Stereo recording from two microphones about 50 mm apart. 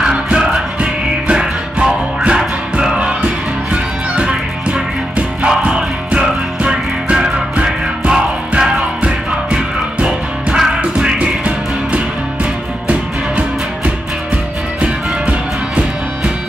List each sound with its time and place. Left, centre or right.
0.0 s music: centre
14.8 s music: right